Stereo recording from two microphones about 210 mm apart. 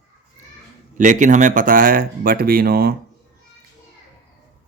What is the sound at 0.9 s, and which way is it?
Speech, 35° right (ahead or behind).